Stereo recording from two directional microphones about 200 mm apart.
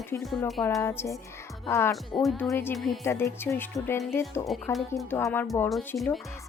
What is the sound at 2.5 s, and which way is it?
Speech, 10° left (ahead or behind).